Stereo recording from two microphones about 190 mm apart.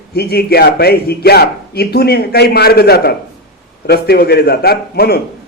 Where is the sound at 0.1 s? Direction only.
55° left (ahead or behind).